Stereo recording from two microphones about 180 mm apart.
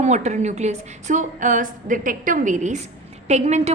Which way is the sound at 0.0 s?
40° right (ahead or behind).